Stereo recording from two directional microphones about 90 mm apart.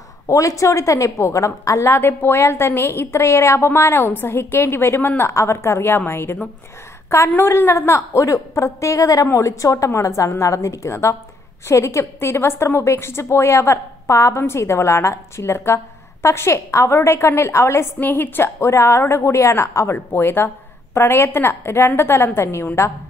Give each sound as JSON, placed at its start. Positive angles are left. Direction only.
{"t": 0.3, "sound": "a woman's voice", "side_deg": 35}
{"t": 17.9, "sound": "a woman's voice", "side_deg": 20}